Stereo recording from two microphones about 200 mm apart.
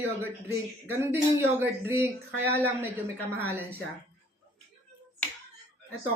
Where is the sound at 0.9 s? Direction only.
10° right (ahead or behind).